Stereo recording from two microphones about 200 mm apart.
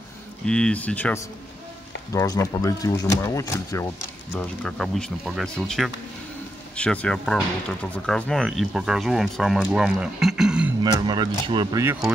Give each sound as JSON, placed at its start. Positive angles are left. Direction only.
{"t": 0.5, "sound": "speech", "side_deg": 5}
{"t": 2.1, "sound": "speech", "side_deg": 20}
{"t": 10.8, "sound": "speech", "side_deg": -20}